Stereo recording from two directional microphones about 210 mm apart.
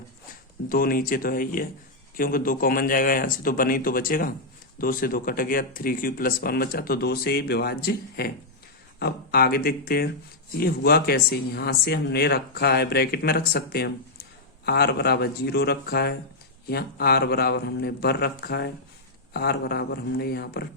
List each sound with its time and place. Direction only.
0.7 s speech: 45° left (ahead or behind)